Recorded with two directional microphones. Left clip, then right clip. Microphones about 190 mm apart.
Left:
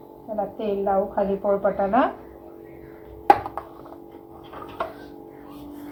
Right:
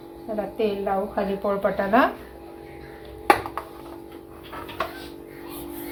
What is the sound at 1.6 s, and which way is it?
Speech, 30° right (ahead or behind).